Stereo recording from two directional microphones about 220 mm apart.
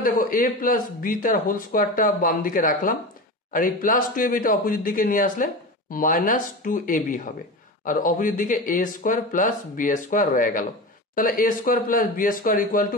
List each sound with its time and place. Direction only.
0.0 s speech: 40° left (ahead or behind)